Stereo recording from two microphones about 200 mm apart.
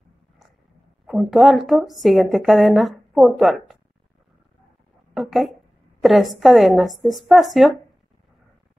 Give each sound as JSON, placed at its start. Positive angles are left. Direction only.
{"t": 1.0, "sound": "a woman's voice", "side_deg": 0}
{"t": 5.1, "sound": "a woman's voice", "side_deg": 0}